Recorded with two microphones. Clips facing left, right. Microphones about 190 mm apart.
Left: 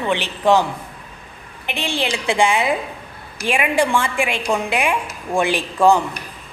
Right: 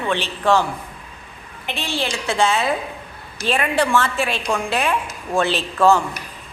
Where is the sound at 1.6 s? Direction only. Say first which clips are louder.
Left 2 dB; 15° left (ahead or behind).